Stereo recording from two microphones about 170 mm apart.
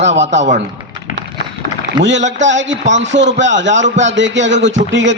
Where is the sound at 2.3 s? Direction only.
90° right.